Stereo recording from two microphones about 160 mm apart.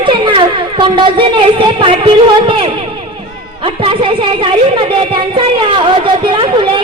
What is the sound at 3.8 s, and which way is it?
A woman's voice, 35° right (ahead or behind).